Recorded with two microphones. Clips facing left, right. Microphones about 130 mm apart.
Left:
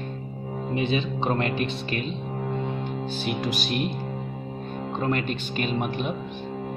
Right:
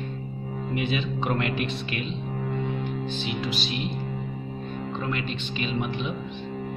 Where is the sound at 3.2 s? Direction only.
45° left (ahead or behind).